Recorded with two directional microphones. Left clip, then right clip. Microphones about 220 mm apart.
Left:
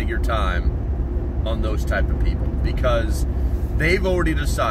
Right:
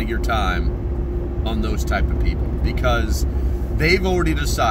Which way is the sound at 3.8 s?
15° right (ahead or behind).